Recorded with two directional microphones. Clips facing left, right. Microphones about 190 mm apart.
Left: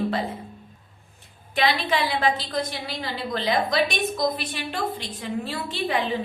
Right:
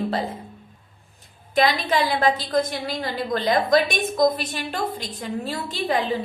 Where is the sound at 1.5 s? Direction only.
40° right (ahead or behind).